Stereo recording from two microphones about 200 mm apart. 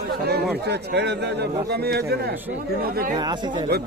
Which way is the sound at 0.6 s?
55° right (ahead or behind).